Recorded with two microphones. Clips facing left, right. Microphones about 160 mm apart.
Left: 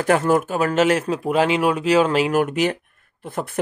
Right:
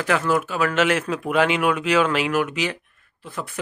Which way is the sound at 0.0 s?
45° left (ahead or behind).